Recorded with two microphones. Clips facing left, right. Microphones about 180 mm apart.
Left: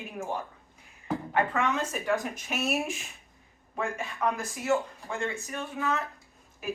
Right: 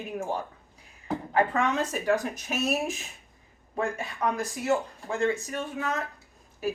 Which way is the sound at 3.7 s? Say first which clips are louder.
Right 2 dB; 40° right (ahead or behind).